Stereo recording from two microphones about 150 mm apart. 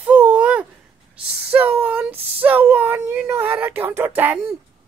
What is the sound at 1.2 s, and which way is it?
Speech, 10° right (ahead or behind).